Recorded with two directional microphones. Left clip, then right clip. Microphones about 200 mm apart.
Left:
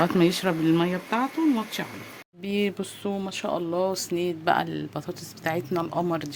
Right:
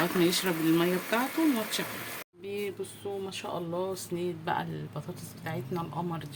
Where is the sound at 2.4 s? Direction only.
45° left (ahead or behind).